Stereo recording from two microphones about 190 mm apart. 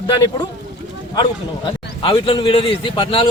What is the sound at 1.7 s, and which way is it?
Speech, 25° left (ahead or behind).